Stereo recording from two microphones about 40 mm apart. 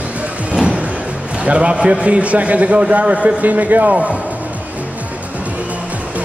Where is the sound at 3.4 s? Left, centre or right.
Right.